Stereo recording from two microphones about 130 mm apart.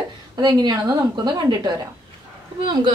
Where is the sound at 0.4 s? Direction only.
35° right (ahead or behind).